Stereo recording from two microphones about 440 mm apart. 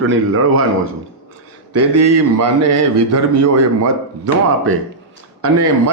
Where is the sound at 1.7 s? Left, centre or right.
Right.